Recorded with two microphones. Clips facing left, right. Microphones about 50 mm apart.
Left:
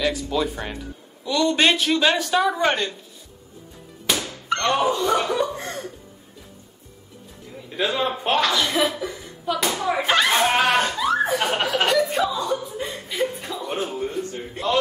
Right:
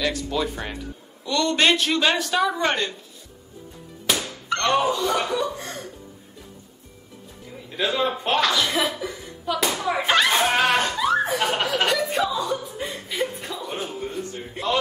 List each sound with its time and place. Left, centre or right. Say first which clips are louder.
0.0 s a man's voice: left 2 dB; centre
4.1 s music: even; centre
4.6 s speech: even; centre
5.3 s chuckle: left 2 dB; left
7.7 s chuckle: even; centre
13.7 s a sound: left 5 dB; centre